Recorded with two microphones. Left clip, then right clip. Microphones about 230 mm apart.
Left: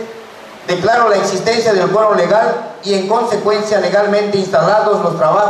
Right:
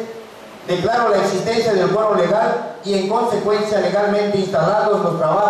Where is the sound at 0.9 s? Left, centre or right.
Centre.